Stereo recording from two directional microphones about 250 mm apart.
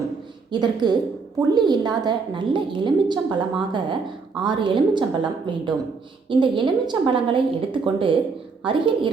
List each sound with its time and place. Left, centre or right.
0.5 s a woman's voice: centre